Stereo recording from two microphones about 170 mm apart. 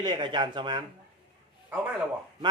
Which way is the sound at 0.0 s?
25° right (ahead or behind).